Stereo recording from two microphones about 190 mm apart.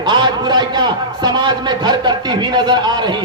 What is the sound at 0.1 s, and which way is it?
A man's voice, 20° right (ahead or behind).